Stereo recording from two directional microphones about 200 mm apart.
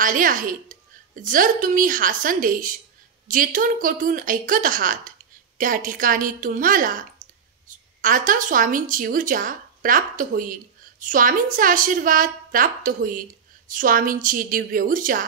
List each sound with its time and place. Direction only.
0.0 s a woman's voice: 45° right (ahead or behind)